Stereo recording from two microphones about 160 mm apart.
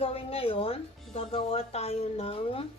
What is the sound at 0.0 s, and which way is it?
Speech, 35° left (ahead or behind).